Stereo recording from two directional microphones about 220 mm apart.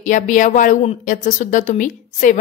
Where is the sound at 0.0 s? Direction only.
35° left (ahead or behind).